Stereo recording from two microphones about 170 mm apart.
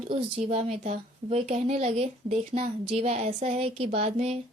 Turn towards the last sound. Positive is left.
turn(degrees=-40)  # may be behind; listen again after turning